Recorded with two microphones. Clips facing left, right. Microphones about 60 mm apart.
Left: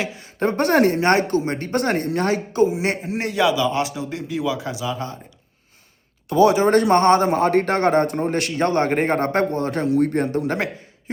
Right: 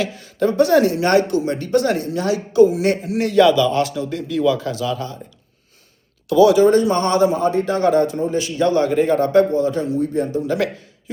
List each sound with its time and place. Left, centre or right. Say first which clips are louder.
0.3 s speech: right 3 dB; left
2.6 s a man's voice: right 4 dB; left
3.3 s a man's voice: right 6 dB; centre
6.2 s speech: right 3 dB; left
6.7 s a man's voice: left 1 dB; left
7.3 s a man's voice: left 1 dB; left
8.6 s a man's voice: right 3 dB; left